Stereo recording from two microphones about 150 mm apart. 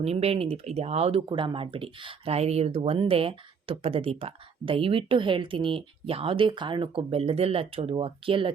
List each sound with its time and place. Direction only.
0.0 s speech: 45° right (ahead or behind)